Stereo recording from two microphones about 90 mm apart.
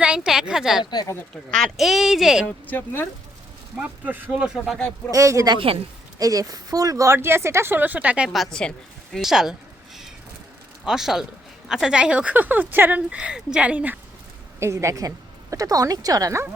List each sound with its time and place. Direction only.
0.0 s a woman's voice: 10° right (ahead or behind)
2.6 s speech: 20° left (ahead or behind)
3.8 s a woman's voice: 20° right (ahead or behind)
4.5 s speech: centre (ahead or behind)
5.1 s a woman's voice: 35° right (ahead or behind); by 8.3 s 15° right (ahead or behind)
8.3 s a woman's voice: 5° left (ahead or behind)
9.1 s speech: 5° right (ahead or behind)
10.8 s a woman's voice: 5° right (ahead or behind)
14.6 s a woman's voice: 35° right (ahead or behind)